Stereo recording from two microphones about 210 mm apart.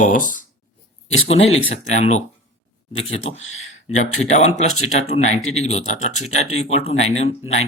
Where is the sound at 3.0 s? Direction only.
70° left (ahead or behind).